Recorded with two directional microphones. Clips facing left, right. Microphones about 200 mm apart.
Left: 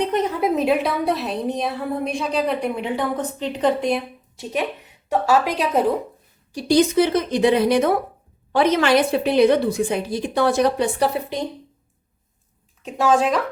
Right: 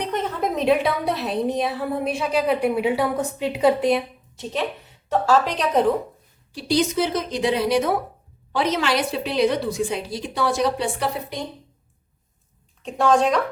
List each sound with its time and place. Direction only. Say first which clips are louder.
0.1 s a woman's voice: left 4 dB; 15° left (ahead or behind)
6.5 s a woman's voice: left 5 dB; 45° left (ahead or behind)
12.8 s a woman's voice: even; 5° left (ahead or behind)